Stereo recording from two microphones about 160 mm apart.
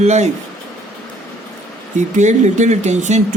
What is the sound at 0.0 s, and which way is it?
Speech, 45° right (ahead or behind).